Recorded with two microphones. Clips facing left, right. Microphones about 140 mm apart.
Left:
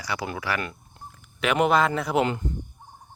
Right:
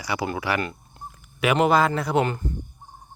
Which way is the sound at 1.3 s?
5° right (ahead or behind).